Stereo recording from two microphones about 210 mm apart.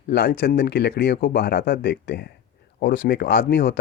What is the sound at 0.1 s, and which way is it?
Speech, 50° left (ahead or behind).